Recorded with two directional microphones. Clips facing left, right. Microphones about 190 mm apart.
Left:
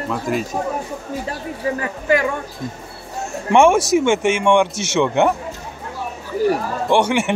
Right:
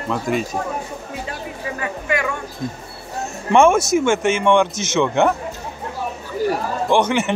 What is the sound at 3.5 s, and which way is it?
A man's voice, 15° left (ahead or behind).